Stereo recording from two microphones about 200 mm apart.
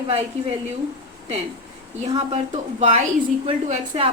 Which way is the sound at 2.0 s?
30° right (ahead or behind).